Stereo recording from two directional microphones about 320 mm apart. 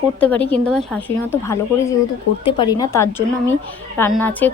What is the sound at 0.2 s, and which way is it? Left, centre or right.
A woman's voice, centre.